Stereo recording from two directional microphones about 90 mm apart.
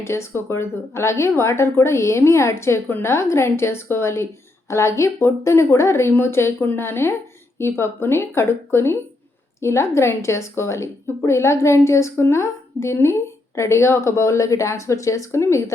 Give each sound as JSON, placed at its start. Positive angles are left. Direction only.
{"t": 0.0, "sound": "a woman's voice", "side_deg": 30}